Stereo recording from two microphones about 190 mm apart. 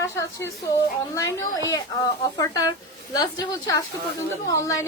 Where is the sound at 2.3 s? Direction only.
20° left (ahead or behind).